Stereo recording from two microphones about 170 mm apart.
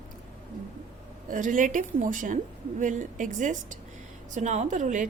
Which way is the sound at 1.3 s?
50° right (ahead or behind).